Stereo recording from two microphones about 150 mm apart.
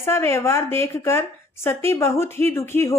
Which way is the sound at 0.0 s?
20° left (ahead or behind).